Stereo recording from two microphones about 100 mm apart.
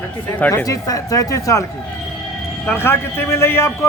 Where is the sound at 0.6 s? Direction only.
35° left (ahead or behind).